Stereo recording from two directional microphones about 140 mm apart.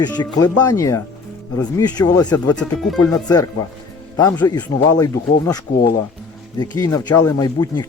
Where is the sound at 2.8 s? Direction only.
Centre (ahead or behind).